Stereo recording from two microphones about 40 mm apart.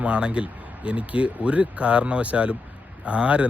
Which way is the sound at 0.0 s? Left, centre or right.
Right.